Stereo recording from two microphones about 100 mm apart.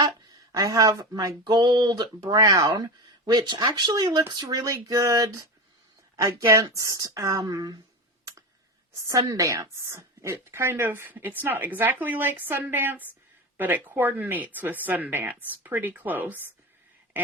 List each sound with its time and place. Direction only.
0.5 s speech: 35° right (ahead or behind)
9.0 s speech: 35° right (ahead or behind); by 16.5 s 20° right (ahead or behind)